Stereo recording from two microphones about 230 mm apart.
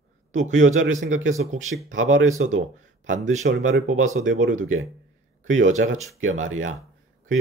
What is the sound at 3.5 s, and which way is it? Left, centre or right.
Speech, right.